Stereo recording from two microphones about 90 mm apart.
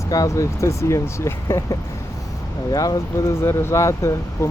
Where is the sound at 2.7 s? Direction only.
45° left (ahead or behind).